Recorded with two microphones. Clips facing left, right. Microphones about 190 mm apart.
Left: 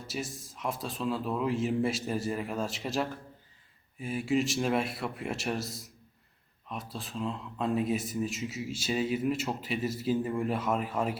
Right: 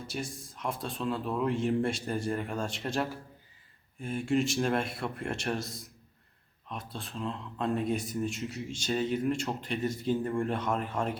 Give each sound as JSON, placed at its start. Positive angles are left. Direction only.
{"t": 0.1, "sound": "speech", "side_deg": 0}